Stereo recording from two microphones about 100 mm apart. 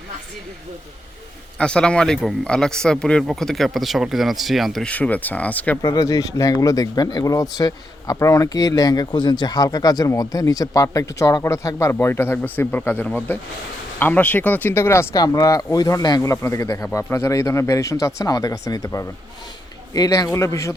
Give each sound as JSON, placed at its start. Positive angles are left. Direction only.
{"t": 1.5, "sound": "speech", "side_deg": 10}
{"t": 4.9, "sound": "speech", "side_deg": 15}
{"t": 5.8, "sound": "speech", "side_deg": 35}
{"t": 15.2, "sound": "speech", "side_deg": 35}